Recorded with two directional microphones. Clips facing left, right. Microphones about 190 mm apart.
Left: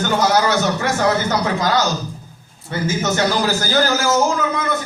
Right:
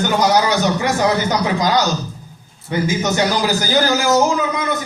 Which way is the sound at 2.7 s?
15° right (ahead or behind).